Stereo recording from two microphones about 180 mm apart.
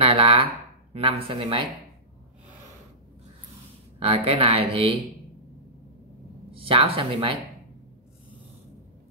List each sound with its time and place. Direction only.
0.0 s a sound: 30° right (ahead or behind)
0.9 s speech: 30° right (ahead or behind)
4.0 s speech: 35° right (ahead or behind)
6.5 s speech: 30° right (ahead or behind)